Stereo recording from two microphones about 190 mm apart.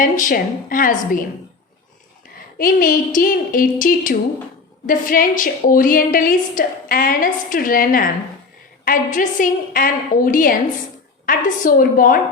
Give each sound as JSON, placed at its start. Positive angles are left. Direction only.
{"t": 0.0, "sound": "a woman's voice", "side_deg": 45}
{"t": 2.6, "sound": "a woman's voice", "side_deg": 45}